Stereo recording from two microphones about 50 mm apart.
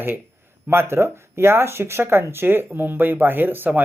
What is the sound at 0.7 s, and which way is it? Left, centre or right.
Speech, right.